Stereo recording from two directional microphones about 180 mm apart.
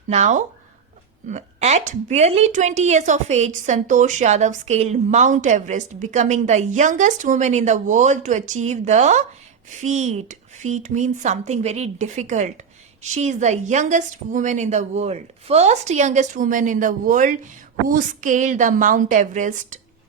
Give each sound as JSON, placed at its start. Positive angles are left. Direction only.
{"t": 0.1, "sound": "a woman's voice", "side_deg": -40}